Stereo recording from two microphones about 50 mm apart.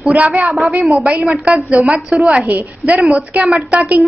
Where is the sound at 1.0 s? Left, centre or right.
Right.